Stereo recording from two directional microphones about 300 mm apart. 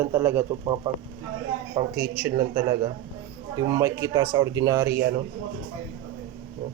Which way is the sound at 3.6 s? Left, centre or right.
Centre.